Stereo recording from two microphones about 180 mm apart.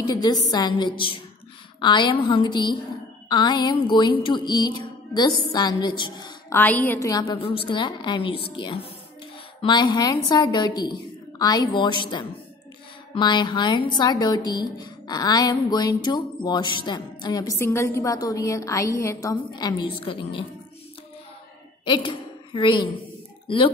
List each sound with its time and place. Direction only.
0.0 s a woman's voice: 20° left (ahead or behind)
6.5 s a woman's voice: 10° left (ahead or behind); by 8.5 s 25° left (ahead or behind)
9.6 s a woman's voice: 25° left (ahead or behind)
21.8 s a woman's voice: 25° left (ahead or behind)